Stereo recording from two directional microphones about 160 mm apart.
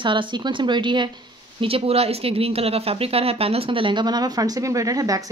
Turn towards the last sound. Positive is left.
turn(degrees=-20)  # may be behind; listen again after turning